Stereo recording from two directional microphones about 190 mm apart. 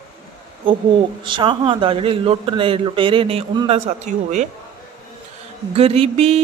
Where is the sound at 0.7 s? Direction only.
30° right (ahead or behind).